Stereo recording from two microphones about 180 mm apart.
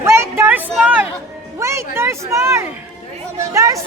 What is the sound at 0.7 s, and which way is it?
Speech, 5° right (ahead or behind).